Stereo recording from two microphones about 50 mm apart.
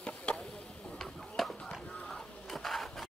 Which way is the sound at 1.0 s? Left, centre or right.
Centre.